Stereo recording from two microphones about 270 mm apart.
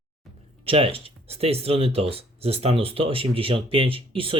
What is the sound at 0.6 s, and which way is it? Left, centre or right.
Speech, centre.